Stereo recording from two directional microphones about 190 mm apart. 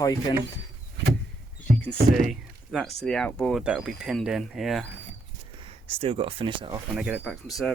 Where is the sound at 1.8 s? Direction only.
Centre (ahead or behind).